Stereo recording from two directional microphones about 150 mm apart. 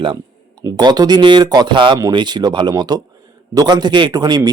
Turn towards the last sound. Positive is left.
turn(degrees=-25)  # may be behind; listen again after turning